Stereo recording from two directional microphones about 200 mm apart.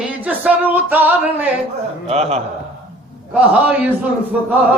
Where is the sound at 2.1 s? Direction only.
30° right (ahead or behind).